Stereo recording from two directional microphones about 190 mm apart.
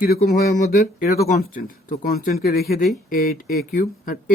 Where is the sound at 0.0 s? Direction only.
50° left (ahead or behind).